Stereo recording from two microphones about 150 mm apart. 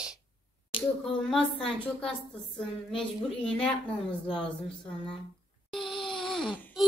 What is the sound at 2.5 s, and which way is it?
A child's voice, 5° left (ahead or behind).